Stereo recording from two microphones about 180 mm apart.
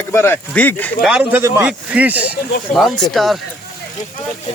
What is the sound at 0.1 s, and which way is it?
Speech, 10° left (ahead or behind).